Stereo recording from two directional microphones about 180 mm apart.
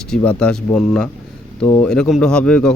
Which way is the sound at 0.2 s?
5° left (ahead or behind).